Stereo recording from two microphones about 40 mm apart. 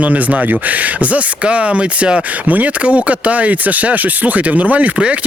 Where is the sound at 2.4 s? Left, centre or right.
Right.